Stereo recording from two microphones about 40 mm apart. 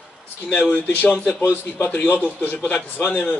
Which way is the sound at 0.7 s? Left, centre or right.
Left.